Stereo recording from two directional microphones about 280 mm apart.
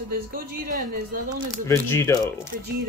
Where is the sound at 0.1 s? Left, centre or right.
Right.